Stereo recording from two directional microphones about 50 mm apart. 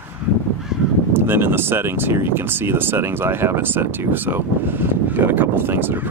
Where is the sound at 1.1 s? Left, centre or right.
Right.